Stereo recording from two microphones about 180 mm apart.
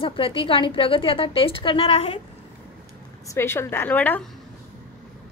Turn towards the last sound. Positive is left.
turn(degrees=10)  # may be behind; listen again after turning